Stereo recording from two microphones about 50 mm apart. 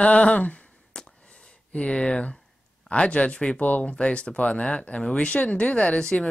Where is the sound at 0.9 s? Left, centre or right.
Centre.